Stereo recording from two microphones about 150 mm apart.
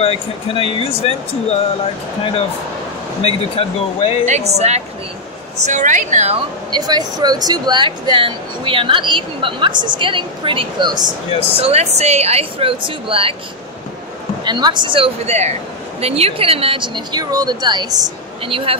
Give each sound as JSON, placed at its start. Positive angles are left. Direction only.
{"t": 0.0, "sound": "speech", "side_deg": 40}
{"t": 3.2, "sound": "speech", "side_deg": 40}
{"t": 4.3, "sound": "speech", "side_deg": -45}
{"t": 5.7, "sound": "speech", "side_deg": -55}
{"t": 6.7, "sound": "speech", "side_deg": -30}
{"t": 11.6, "sound": "speech", "side_deg": -45}
{"t": 14.4, "sound": "speech", "side_deg": -30}